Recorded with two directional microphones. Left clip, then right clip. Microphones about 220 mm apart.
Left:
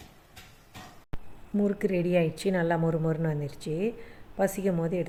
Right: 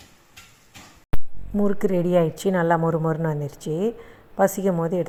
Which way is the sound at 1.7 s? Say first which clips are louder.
Right 6 dB; centre (ahead or behind).